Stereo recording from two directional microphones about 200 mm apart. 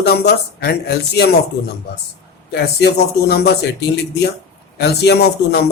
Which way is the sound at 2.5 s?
55° left (ahead or behind).